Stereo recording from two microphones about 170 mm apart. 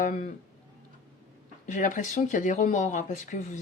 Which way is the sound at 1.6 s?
50° left (ahead or behind).